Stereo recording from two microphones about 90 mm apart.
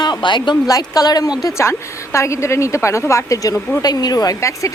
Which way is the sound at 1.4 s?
30° left (ahead or behind).